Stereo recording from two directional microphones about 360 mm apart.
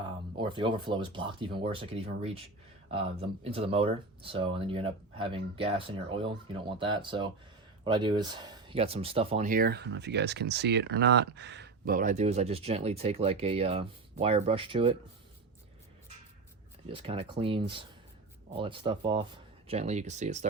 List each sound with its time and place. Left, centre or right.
0.3 s speech: centre
16.9 s speech: centre